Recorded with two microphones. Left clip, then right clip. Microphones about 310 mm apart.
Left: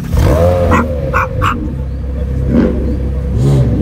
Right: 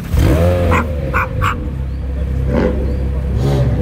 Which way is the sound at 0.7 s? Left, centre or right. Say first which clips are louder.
Left 4 dB; centre.